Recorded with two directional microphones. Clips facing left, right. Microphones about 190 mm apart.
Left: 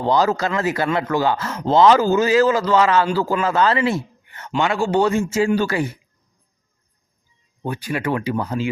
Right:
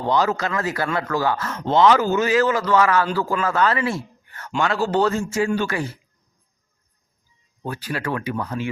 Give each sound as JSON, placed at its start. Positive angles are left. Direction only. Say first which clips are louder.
{"t": 0.0, "sound": "speech", "louder": "left 3 dB", "side_deg": 35}
{"t": 5.3, "sound": "speech", "louder": "left 3 dB", "side_deg": 25}
{"t": 7.6, "sound": "speech", "louder": "left 3 dB", "side_deg": 15}